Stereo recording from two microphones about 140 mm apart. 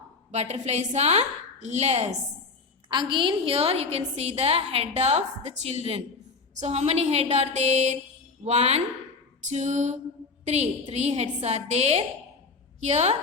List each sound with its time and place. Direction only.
0.3 s a woman's voice: 55° right (ahead or behind)
2.9 s a woman's voice: 35° right (ahead or behind); by 8.8 s 50° right (ahead or behind)
9.5 s music: 55° right (ahead or behind)
10.4 s a woman's voice: 55° right (ahead or behind)